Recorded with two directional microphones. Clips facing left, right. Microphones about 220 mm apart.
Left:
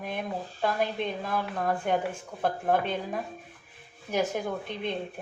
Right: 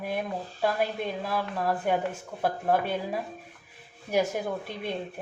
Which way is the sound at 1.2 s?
5° right (ahead or behind).